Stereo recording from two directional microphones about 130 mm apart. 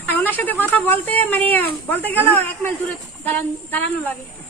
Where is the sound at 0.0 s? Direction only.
15° left (ahead or behind).